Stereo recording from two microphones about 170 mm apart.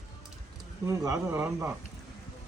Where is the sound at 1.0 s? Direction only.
15° right (ahead or behind).